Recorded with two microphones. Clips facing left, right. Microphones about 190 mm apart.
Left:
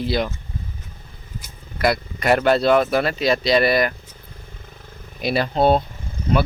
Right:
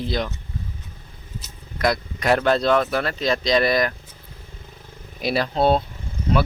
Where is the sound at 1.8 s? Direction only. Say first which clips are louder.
Left 2 dB; 5° left (ahead or behind).